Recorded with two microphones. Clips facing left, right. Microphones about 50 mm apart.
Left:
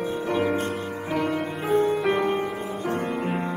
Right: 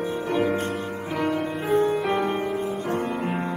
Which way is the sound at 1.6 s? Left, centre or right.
Left.